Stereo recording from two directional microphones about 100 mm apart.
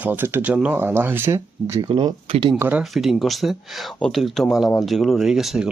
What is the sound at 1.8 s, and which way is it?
Speech, 45° right (ahead or behind).